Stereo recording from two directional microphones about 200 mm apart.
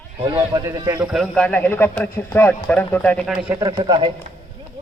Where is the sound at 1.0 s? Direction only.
Centre (ahead or behind).